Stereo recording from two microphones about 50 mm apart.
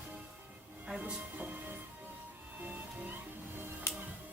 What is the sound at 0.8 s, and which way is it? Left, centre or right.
Speech, right.